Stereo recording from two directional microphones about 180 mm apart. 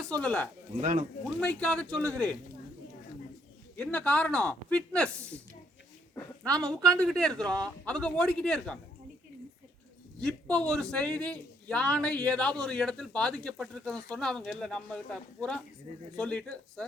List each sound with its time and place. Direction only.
0.0 s speech: 5° left (ahead or behind)
0.8 s speech: 40° right (ahead or behind)
1.4 s speech: 5° left (ahead or behind)
3.8 s speech: 10° left (ahead or behind)
10.2 s speech: 5° left (ahead or behind)